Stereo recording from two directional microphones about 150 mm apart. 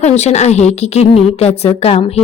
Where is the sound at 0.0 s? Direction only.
50° left (ahead or behind).